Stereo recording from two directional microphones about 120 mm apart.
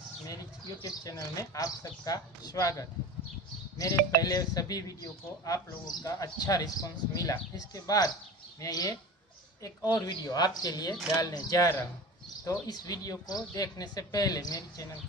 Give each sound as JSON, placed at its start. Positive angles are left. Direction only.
{"t": 0.8, "sound": "speech", "side_deg": 30}
{"t": 5.9, "sound": "speech", "side_deg": 30}